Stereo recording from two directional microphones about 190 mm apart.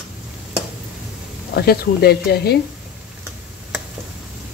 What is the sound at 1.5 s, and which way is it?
Speech, 55° left (ahead or behind).